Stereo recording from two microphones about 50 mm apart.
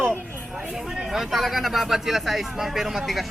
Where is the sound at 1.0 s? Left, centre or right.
Centre.